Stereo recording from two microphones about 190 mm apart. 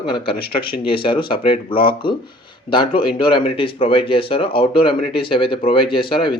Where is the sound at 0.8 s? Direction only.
25° left (ahead or behind).